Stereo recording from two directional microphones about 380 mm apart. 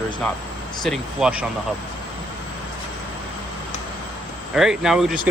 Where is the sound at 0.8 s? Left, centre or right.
Centre.